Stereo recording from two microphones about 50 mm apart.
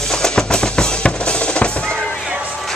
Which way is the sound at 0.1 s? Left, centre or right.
Centre.